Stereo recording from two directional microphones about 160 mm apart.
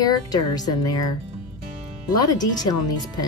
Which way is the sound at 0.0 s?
25° left (ahead or behind).